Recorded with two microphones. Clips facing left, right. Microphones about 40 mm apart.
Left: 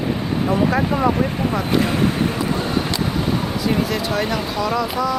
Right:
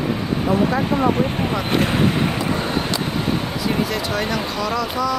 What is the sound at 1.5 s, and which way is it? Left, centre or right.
Speech, right.